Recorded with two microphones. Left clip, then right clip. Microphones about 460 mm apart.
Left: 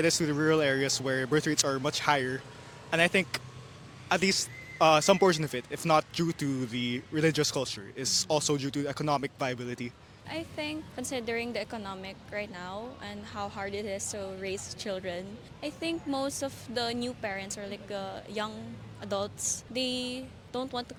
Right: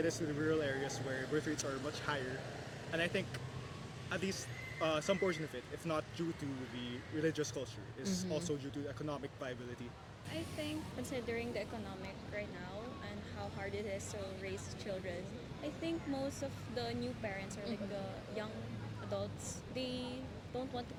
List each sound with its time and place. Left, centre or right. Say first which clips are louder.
0.0 s speech: left 10 dB; left
10.3 s speech: left 7 dB; left
19.7 s speech: left 8 dB; left